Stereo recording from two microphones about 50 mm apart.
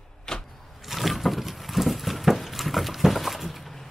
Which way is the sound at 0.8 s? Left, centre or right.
Centre.